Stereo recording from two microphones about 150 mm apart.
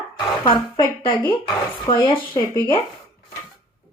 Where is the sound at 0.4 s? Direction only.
30° left (ahead or behind).